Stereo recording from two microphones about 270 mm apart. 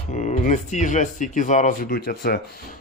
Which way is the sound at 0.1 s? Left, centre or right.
Left.